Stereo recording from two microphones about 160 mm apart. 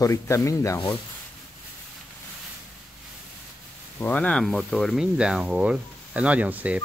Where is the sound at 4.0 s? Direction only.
10° left (ahead or behind); by 6.8 s 10° right (ahead or behind).